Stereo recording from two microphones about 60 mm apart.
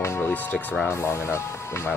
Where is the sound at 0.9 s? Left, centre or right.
Left.